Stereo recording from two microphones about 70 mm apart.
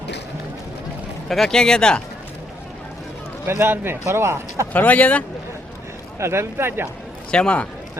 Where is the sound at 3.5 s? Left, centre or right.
Right.